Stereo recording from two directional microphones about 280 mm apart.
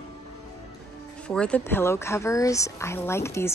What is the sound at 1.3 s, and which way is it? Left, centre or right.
A woman's voice, centre.